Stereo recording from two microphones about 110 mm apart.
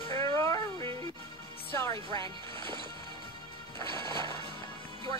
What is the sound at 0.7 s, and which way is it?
Music, 45° right (ahead or behind).